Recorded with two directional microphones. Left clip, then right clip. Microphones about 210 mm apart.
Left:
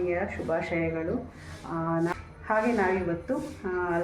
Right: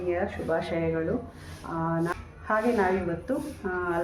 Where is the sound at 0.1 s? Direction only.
Centre (ahead or behind).